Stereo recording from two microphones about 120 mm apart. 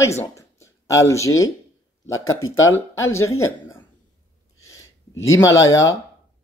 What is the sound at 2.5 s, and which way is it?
Speech, 25° left (ahead or behind).